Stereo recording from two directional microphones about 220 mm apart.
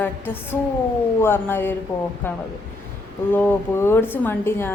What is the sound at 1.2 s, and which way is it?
A woman's voice, 10° left (ahead or behind).